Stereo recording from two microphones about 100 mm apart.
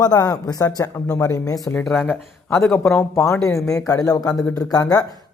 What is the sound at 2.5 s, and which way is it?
Speech, 5° left (ahead or behind).